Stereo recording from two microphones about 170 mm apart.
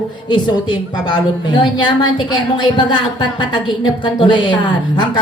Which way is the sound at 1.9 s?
25° left (ahead or behind).